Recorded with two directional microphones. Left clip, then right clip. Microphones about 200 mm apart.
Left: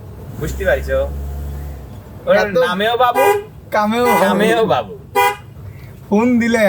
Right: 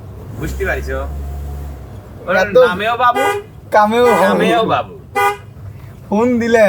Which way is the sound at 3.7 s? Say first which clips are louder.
Right 5 dB; 20° right (ahead or behind).